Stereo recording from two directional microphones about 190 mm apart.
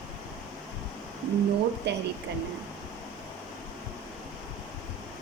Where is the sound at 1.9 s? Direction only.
65° right (ahead or behind).